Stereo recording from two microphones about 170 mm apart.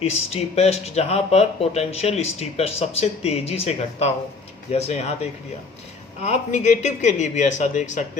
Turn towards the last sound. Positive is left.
turn(degrees=45)  # may be behind; listen again after turning